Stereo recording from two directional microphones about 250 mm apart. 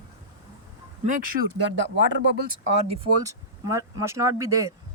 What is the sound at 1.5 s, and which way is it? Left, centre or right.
Speech, right.